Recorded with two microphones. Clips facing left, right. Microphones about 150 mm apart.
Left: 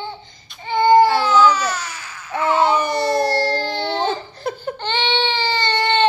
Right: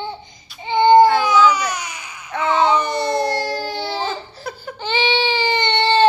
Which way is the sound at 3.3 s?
10° right (ahead or behind).